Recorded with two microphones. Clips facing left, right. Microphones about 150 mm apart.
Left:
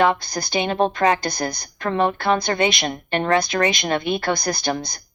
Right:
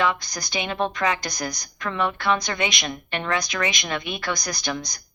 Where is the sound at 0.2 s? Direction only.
30° left (ahead or behind).